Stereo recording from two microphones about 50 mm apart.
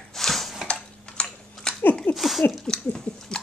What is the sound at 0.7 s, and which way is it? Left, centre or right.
Typing, centre.